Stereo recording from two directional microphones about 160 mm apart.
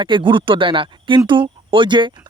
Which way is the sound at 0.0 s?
30° right (ahead or behind).